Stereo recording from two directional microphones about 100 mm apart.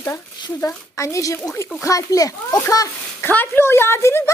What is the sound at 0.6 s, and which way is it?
Speech, 30° left (ahead or behind).